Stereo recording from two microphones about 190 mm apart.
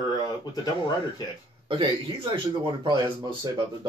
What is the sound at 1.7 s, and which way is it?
Speech, 30° right (ahead or behind).